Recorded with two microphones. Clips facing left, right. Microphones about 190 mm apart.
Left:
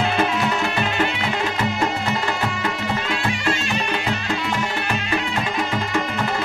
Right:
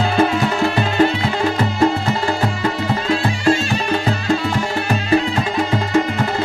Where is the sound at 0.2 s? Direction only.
35° right (ahead or behind).